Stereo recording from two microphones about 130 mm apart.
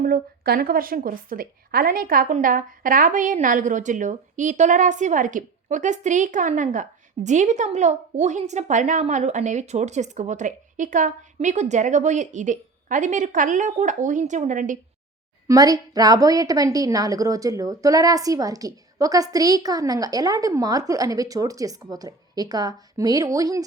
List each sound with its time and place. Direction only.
0.8 s a woman's voice: 90° right; by 14.8 s 75° right (ahead or behind)
15.4 s a woman's voice: 25° right (ahead or behind)